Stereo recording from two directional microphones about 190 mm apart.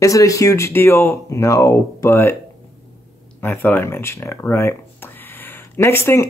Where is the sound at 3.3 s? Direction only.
10° left (ahead or behind).